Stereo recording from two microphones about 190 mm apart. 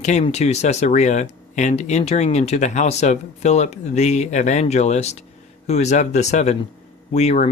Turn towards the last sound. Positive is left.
turn(degrees=35)  # may be behind; listen again after turning